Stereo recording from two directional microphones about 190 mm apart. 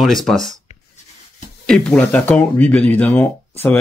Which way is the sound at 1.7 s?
5° left (ahead or behind).